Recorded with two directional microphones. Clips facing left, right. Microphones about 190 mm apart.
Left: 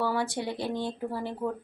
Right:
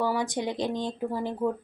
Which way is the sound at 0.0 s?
15° right (ahead or behind).